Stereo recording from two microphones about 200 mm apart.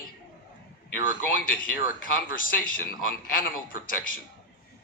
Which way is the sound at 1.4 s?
45° left (ahead or behind).